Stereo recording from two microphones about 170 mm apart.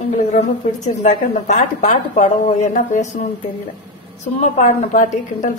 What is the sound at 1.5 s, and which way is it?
A woman's voice, 45° left (ahead or behind).